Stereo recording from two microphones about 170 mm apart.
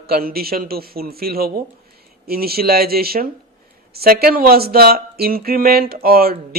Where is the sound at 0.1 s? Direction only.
60° right (ahead or behind).